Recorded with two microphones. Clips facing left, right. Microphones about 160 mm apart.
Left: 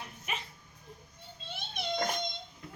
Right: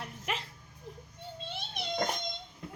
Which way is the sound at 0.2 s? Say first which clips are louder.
Right 3 dB; 90° right.